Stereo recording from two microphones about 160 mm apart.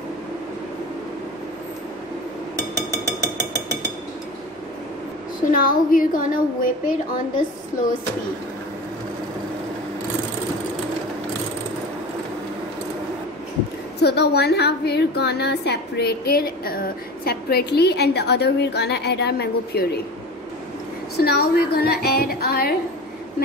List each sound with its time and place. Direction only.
5.4 s speech: 60° left (ahead or behind)
14.0 s a woman's voice: 90° left
21.2 s a woman's voice: 70° left (ahead or behind)